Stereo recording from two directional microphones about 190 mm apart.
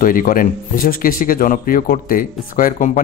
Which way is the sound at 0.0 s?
45° left (ahead or behind).